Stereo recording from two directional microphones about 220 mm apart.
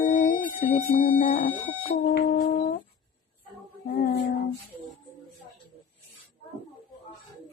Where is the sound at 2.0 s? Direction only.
45° left (ahead or behind).